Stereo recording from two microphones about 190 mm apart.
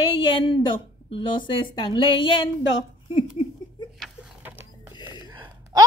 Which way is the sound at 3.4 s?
25° left (ahead or behind).